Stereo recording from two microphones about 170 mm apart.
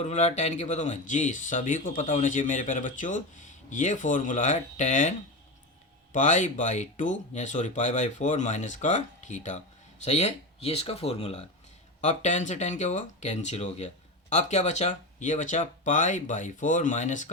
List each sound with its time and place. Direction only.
0.0 s speech: 40° left (ahead or behind)
6.1 s speech: 45° left (ahead or behind)